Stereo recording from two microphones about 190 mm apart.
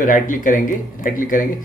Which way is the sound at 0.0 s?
45° left (ahead or behind).